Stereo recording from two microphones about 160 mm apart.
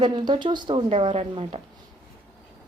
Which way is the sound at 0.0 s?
25° right (ahead or behind).